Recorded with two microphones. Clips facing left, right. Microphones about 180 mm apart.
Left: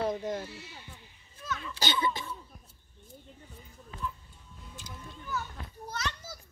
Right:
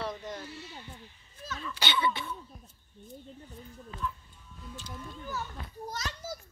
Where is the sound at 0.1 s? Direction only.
25° left (ahead or behind).